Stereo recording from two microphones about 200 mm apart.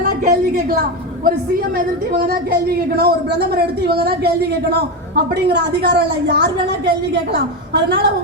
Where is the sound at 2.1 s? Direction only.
50° right (ahead or behind).